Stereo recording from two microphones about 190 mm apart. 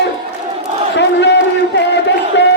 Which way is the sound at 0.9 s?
65° left (ahead or behind).